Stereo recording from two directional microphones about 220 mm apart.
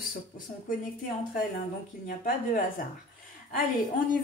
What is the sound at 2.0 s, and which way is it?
Speech, 40° left (ahead or behind).